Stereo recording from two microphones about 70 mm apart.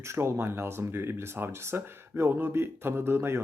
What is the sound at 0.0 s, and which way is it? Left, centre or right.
Speech, right.